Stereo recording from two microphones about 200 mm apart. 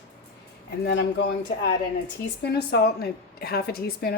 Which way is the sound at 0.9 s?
60° left (ahead or behind).